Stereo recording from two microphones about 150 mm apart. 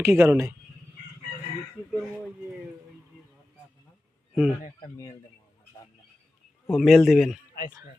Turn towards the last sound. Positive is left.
turn(degrees=0)  # may be behind; listen again after turning